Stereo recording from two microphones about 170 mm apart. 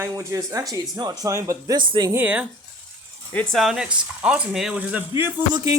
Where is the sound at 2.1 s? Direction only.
10° right (ahead or behind).